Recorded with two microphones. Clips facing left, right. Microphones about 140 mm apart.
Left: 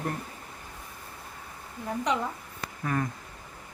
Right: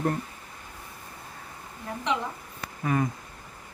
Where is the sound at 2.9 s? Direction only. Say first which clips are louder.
Right 4 dB; 10° right (ahead or behind).